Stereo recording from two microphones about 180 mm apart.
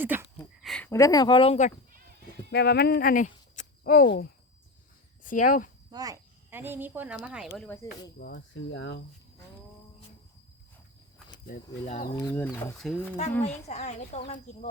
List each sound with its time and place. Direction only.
0.0 s speech: 10° right (ahead or behind)
0.6 s a sound: centre (ahead or behind)
0.9 s speech: 15° left (ahead or behind)
2.5 s speech: 65° left (ahead or behind)
5.2 s speech: 50° left (ahead or behind)
5.9 s speech: 20° right (ahead or behind); by 7.8 s 5° left (ahead or behind)
8.2 s speech: 75° left (ahead or behind)
11.9 s speech: 40° left (ahead or behind)
12.2 s speech: 10° left (ahead or behind)
13.7 s speech: 40° left (ahead or behind)